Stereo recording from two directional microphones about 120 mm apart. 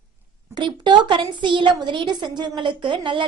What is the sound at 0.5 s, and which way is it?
A woman's voice, 40° right (ahead or behind).